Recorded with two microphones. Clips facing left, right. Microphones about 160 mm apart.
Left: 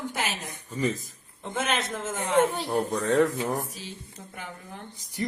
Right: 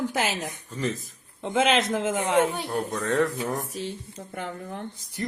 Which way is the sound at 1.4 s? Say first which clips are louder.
Right 7 dB; 90° right.